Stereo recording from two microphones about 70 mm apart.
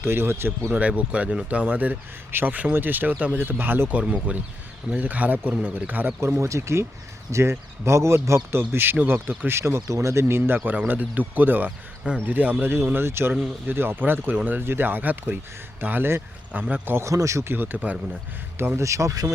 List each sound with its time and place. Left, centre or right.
0.0 s speech: right
0.7 s speech: right
6.1 s speech: right
9.5 s speech: right
10.6 s speech: right
16.5 s speech: centre
16.8 s speech: right
17.1 s speech: right
17.5 s speech: right
18.8 s speech: right